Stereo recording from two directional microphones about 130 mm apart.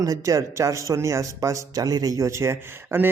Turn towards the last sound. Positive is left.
turn(degrees=-20)  # may be behind; listen again after turning